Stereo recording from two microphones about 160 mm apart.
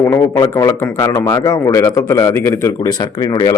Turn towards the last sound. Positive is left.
turn(degrees=25)  # may be behind; listen again after turning